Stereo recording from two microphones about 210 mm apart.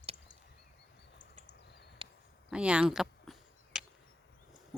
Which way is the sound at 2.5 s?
5° right (ahead or behind).